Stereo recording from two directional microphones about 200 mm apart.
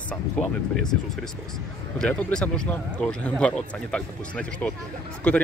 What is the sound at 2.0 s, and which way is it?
Speech, 5° left (ahead or behind).